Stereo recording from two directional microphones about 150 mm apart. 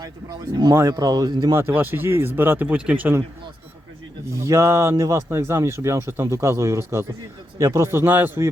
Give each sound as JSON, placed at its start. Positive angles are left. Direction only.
{"t": 0.0, "sound": "speech", "side_deg": -25}
{"t": 1.6, "sound": "a man's voice", "side_deg": -15}
{"t": 4.3, "sound": "a man's voice", "side_deg": -20}